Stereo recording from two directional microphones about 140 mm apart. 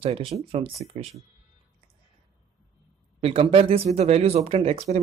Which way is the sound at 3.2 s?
45° right (ahead or behind).